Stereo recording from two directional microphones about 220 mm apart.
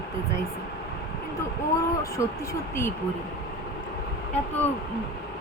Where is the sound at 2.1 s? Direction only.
15° left (ahead or behind).